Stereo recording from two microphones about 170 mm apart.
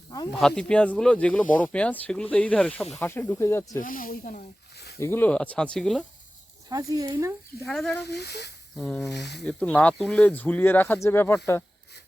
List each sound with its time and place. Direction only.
0.3 s speech: centre (ahead or behind)
3.8 s speech: 55° left (ahead or behind)
4.9 s speech: 15° left (ahead or behind)
6.7 s speech: 20° right (ahead or behind)
7.6 s speech: centre (ahead or behind)
8.0 s speech: 80° left
8.7 s speech: centre (ahead or behind)
9.1 s speech: 80° left
9.4 s speech: 5° left (ahead or behind)